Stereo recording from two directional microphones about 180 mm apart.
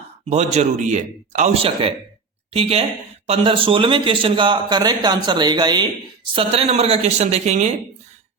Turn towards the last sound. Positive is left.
turn(degrees=-40)  # may be behind; listen again after turning